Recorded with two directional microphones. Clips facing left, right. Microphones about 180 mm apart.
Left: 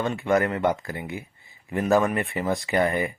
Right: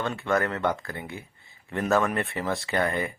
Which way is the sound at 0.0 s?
15° left (ahead or behind).